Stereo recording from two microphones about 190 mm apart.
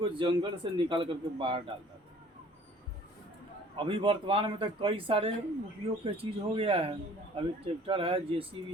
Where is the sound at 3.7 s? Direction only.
25° right (ahead or behind).